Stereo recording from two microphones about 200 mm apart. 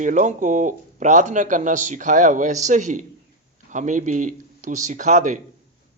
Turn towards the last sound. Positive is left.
turn(degrees=-40)  # may be behind; listen again after turning